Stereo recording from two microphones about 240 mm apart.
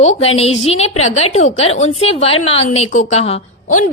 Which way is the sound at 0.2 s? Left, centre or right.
Left.